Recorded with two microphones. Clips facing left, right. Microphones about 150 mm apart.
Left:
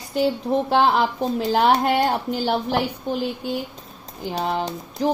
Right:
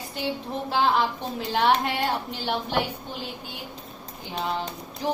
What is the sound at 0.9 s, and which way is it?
A woman's voice, 35° left (ahead or behind).